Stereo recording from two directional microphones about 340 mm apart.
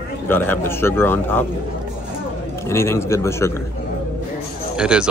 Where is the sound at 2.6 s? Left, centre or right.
Centre.